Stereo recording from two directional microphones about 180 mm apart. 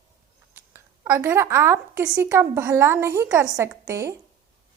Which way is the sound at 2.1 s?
15° right (ahead or behind).